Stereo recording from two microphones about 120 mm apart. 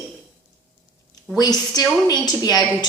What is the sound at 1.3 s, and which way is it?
A woman's voice, 30° left (ahead or behind).